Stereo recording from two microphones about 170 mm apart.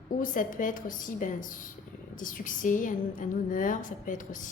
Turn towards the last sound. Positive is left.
turn(degrees=50)  # may be behind; listen again after turning